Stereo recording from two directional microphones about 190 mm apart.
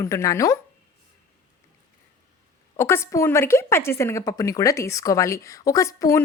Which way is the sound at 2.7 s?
15° left (ahead or behind).